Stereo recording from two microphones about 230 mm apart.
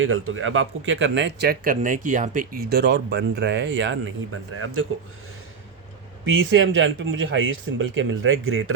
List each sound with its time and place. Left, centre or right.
0.0 s speech: right
6.2 s speech: right